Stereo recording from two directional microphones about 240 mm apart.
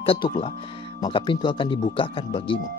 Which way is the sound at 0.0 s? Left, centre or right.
Left.